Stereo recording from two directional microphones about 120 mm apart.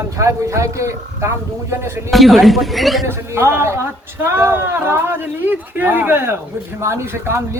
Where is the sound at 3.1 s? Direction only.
20° right (ahead or behind).